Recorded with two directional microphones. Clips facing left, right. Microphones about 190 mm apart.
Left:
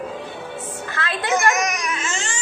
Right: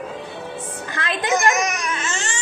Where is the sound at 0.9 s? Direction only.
15° right (ahead or behind).